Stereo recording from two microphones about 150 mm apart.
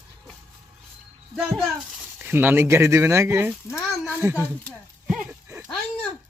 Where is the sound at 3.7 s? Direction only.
20° left (ahead or behind).